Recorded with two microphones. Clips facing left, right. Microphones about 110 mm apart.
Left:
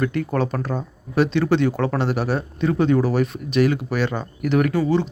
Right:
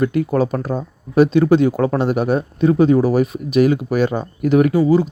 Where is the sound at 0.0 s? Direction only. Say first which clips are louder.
Right 5 dB; 15° right (ahead or behind).